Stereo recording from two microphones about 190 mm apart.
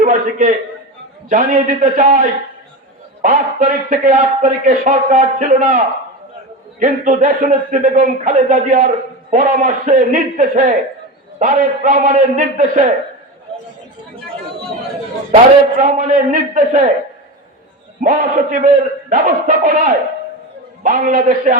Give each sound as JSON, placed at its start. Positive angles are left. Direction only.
{"t": 0.0, "sound": "a sound", "side_deg": -45}
{"t": 1.3, "sound": "speech", "side_deg": -45}
{"t": 15.8, "sound": "speech", "side_deg": -45}
{"t": 18.0, "sound": "speech", "side_deg": -45}